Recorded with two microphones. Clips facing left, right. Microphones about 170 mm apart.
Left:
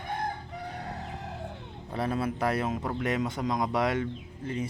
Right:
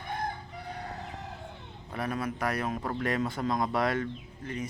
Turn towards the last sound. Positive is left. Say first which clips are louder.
# left 3 dB
turn(degrees=25)  # may be behind; listen again after turning